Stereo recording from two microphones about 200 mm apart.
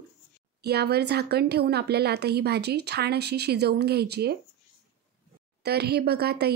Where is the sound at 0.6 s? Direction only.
55° right (ahead or behind).